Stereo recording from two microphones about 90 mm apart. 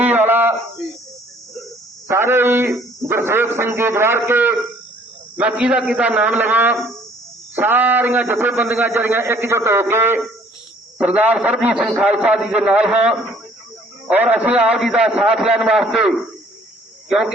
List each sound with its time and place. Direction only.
0.0 s a sound: 20° right (ahead or behind)
2.0 s a man's voice: 30° right (ahead or behind)
5.4 s a man's voice: 15° right (ahead or behind)
10.9 s a man's voice: 15° right (ahead or behind)
14.8 s a man's voice: 5° right (ahead or behind)